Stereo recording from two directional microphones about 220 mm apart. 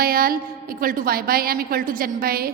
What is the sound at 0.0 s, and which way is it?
A woman's voice, 40° right (ahead or behind).